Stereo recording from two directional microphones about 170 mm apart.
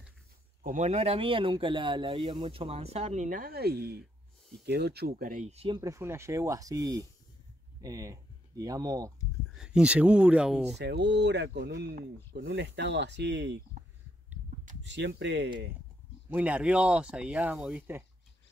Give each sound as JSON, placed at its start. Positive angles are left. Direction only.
{"t": 0.7, "sound": "speech", "side_deg": -45}
{"t": 5.8, "sound": "speech", "side_deg": -20}
{"t": 9.6, "sound": "speech", "side_deg": -5}
{"t": 10.8, "sound": "speech", "side_deg": -90}
{"t": 14.8, "sound": "speech", "side_deg": -90}
{"t": 16.3, "sound": "speech", "side_deg": -10}